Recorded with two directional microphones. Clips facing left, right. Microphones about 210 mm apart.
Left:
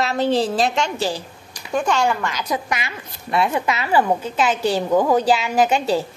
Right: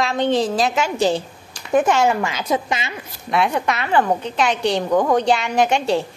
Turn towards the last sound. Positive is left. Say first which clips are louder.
# even
turn(degrees=0)  # may be behind; listen again after turning